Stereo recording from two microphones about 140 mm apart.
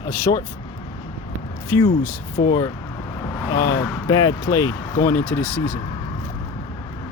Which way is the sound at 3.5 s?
25° left (ahead or behind).